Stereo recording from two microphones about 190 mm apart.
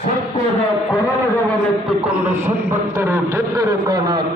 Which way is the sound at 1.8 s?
5° right (ahead or behind).